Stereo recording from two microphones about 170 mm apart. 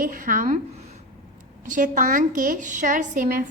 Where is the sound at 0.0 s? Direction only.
50° right (ahead or behind).